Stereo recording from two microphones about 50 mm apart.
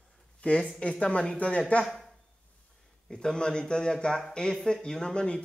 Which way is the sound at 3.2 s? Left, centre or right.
Centre.